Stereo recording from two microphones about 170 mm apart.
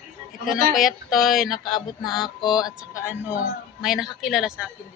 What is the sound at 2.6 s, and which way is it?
Speech, 15° left (ahead or behind).